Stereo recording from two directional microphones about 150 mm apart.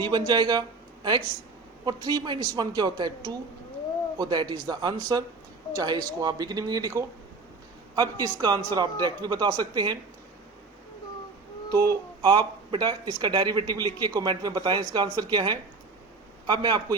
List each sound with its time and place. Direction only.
0.0 s speech: 30° right (ahead or behind)
1.8 s speech: 25° right (ahead or behind)
11.7 s speech: 25° right (ahead or behind)